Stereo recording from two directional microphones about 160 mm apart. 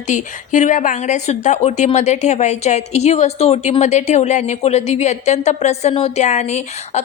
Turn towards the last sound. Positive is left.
turn(degrees=45)  # may be behind; listen again after turning